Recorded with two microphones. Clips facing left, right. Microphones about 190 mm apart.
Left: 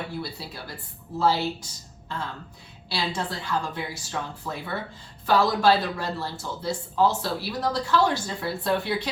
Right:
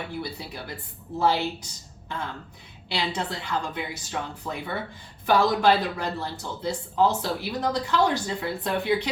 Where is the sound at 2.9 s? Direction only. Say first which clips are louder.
Even; 20° right (ahead or behind).